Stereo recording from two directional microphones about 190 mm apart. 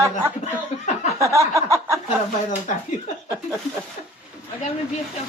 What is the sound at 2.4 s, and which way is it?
Speech, 40° left (ahead or behind).